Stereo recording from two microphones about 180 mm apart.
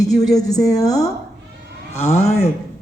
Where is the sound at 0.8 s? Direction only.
20° left (ahead or behind).